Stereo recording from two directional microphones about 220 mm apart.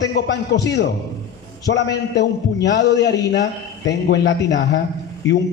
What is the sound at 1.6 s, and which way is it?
A man's voice, 50° left (ahead or behind).